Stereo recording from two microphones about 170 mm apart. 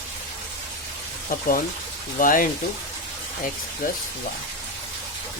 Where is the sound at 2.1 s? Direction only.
55° left (ahead or behind).